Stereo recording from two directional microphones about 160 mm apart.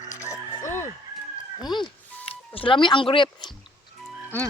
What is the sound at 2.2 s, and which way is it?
Speech, 35° left (ahead or behind).